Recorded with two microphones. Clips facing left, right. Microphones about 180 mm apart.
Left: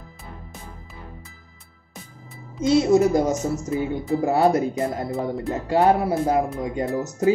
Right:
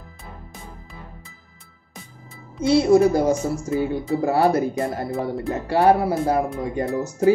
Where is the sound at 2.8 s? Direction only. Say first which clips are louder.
Right 3 dB; 20° left (ahead or behind).